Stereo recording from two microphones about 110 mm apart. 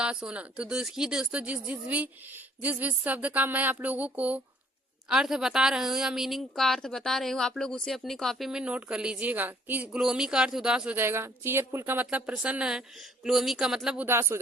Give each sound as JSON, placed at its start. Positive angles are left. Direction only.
{"t": 0.0, "sound": "a woman's voice", "side_deg": -10}
{"t": 10.9, "sound": "a woman's voice", "side_deg": -20}
{"t": 14.1, "sound": "speech", "side_deg": -20}